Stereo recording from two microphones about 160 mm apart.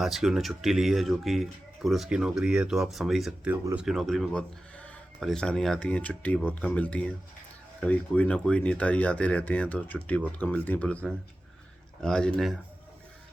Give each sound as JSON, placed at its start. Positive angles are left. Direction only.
{"t": 0.0, "sound": "speech", "side_deg": 0}